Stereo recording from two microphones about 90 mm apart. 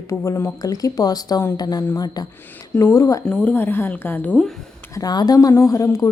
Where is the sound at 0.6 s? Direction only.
40° left (ahead or behind).